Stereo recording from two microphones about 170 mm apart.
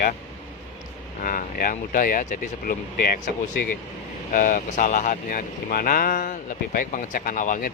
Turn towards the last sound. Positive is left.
turn(degrees=50)  # may be behind; listen again after turning